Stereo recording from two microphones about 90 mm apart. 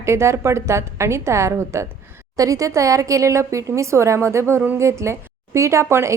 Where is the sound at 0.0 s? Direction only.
30° right (ahead or behind).